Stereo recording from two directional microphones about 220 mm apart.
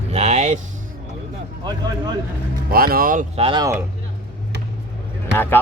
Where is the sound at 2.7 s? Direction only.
40° right (ahead or behind).